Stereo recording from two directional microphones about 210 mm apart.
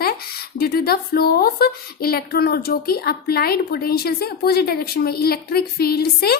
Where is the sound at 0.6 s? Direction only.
45° left (ahead or behind).